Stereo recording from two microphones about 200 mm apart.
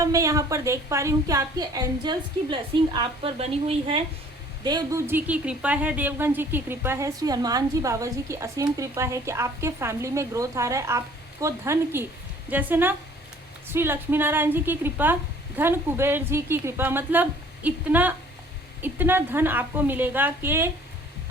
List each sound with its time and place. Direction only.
0.0 s a woman's voice: 15° right (ahead or behind)
4.6 s a woman's voice: 20° right (ahead or behind)